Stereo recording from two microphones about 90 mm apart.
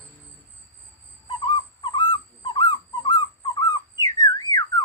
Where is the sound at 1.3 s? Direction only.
65° left (ahead or behind).